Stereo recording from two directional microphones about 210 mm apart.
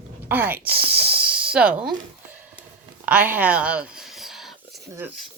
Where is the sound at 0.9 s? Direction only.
50° right (ahead or behind).